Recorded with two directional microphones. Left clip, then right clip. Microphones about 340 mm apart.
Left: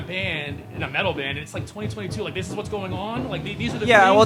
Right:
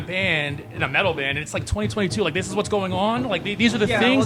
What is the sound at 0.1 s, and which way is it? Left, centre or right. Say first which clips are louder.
Speech: right 5 dB; right.